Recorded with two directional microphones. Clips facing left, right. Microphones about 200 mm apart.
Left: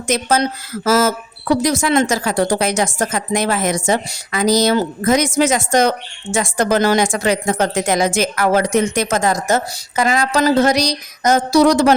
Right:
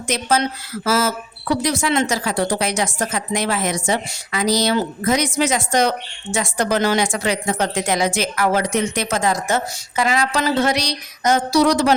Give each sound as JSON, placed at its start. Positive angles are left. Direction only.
{"t": 0.1, "sound": "a woman's voice", "side_deg": 45}